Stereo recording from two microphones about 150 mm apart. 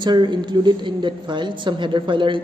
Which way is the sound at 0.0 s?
30° right (ahead or behind).